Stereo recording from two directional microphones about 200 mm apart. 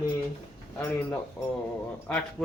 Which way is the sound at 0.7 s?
10° left (ahead or behind).